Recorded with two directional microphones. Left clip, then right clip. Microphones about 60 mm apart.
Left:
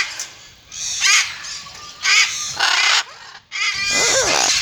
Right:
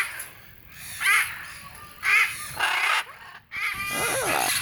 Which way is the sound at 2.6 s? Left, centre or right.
Left.